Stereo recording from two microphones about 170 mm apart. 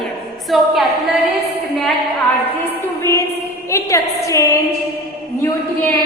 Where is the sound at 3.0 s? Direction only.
15° left (ahead or behind).